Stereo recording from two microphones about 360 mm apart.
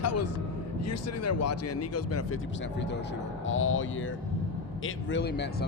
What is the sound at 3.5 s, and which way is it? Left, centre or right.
Speech, left.